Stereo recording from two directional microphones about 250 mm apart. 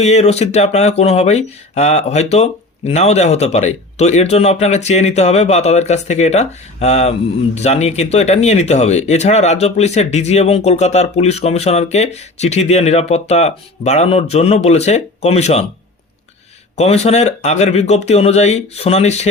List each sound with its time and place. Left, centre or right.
0.0 s speech: left
16.7 s speech: left